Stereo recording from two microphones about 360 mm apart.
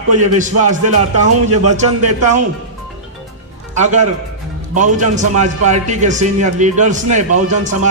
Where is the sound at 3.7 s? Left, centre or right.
Centre.